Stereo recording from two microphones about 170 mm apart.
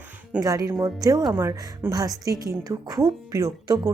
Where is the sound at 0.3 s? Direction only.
20° right (ahead or behind).